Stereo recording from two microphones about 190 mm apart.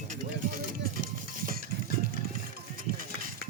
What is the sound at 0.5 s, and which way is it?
Music, 50° right (ahead or behind).